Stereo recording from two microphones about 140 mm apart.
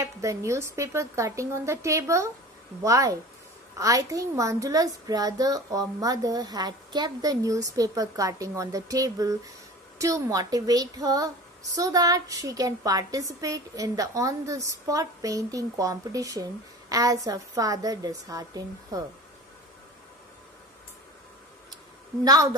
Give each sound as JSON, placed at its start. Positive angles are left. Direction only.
{"t": 0.0, "sound": "a child's voice", "side_deg": -20}
{"t": 22.2, "sound": "a child's voice", "side_deg": -25}